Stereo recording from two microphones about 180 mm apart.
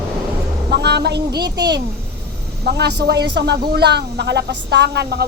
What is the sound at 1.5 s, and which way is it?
Speech, 65° right (ahead or behind).